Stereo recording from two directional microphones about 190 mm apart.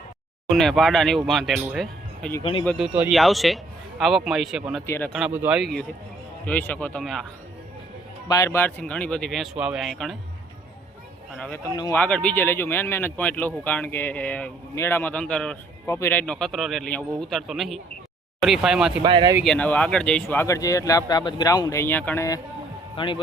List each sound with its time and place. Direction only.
0.5 s a man's voice: centre (ahead or behind)
2.4 s speech: 30° left (ahead or behind)
2.6 s a man's voice: centre (ahead or behind)
4.9 s speech: 10° left (ahead or behind)
5.1 s a man's voice: 5° right (ahead or behind)
6.4 s speech: 10° left (ahead or behind)
8.3 s a man's voice: 15° left (ahead or behind)
11.3 s a man's voice: 5° left (ahead or behind)
19.0 s speech: 20° right (ahead or behind)
19.5 s speech: 5° left (ahead or behind)
23.0 s speech: 25° left (ahead or behind)